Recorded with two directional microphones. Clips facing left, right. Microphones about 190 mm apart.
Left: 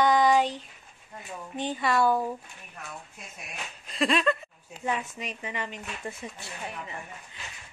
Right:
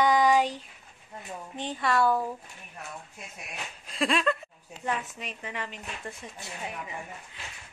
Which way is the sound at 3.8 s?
Centre (ahead or behind).